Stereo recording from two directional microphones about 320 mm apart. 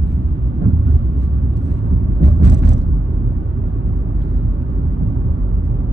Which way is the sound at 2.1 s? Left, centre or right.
Left.